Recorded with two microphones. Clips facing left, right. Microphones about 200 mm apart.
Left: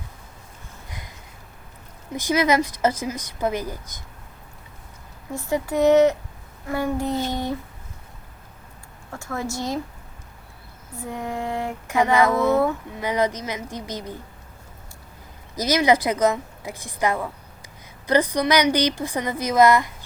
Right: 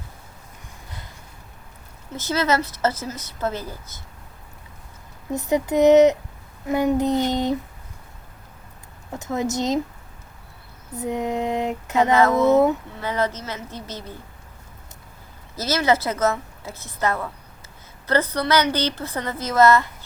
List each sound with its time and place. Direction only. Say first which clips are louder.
0.9 s a sound: left 1 dB; 15° left (ahead or behind)
2.1 s a woman's voice: left 2 dB; 15° left (ahead or behind)
5.3 s speech: right 3 dB; 20° right (ahead or behind)
9.1 s speech: right 5 dB; 20° right (ahead or behind)
10.9 s speech: right 5 dB; 20° right (ahead or behind)
12.9 s a woman's voice: left 2 dB; 15° left (ahead or behind)
15.5 s a woman's voice: left 2 dB; 15° left (ahead or behind)